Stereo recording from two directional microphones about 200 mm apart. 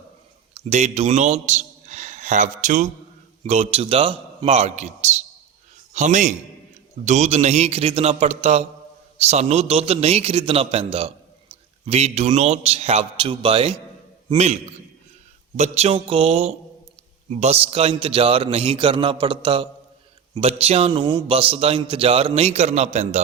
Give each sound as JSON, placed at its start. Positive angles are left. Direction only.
{"t": 0.5, "sound": "a man's voice", "side_deg": -35}